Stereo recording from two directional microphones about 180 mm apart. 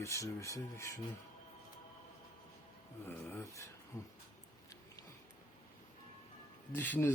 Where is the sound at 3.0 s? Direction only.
10° left (ahead or behind).